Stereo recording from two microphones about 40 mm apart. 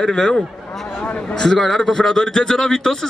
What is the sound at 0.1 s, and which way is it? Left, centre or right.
Speech, centre.